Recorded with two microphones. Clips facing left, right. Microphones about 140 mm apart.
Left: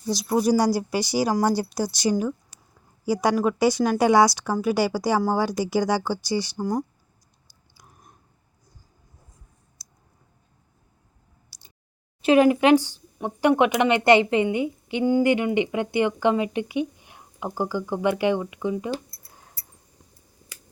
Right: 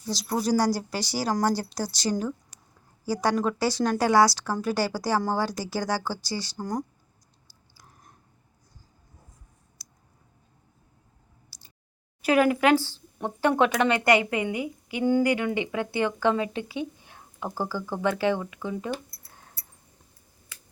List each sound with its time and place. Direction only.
0.1 s speech: 15° left (ahead or behind)
7.7 s chewing: 20° left (ahead or behind)
11.5 s a sound: 20° left (ahead or behind)
12.2 s speech: 20° left (ahead or behind)